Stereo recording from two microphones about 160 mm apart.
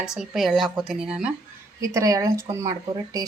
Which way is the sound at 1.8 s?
20° right (ahead or behind).